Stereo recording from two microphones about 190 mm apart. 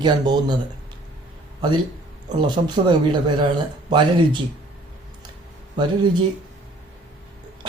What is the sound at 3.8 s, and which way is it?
Speech, 25° right (ahead or behind).